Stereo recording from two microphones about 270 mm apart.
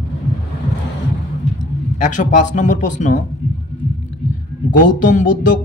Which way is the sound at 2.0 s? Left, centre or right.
Left.